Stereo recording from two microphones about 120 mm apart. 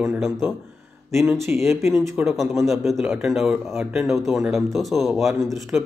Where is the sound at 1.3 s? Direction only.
20° right (ahead or behind).